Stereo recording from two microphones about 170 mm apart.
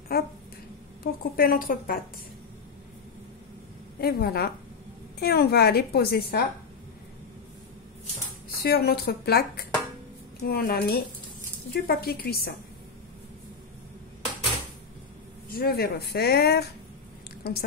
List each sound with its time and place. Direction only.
0.1 s a sound: 65° left (ahead or behind)
1.0 s a woman's voice: 60° left (ahead or behind)
4.0 s a woman's voice: 65° left (ahead or behind)
8.6 s a woman's voice: 65° left (ahead or behind)
15.5 s a woman's voice: 65° left (ahead or behind)